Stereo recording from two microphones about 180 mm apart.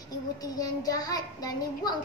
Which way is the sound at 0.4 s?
20° left (ahead or behind).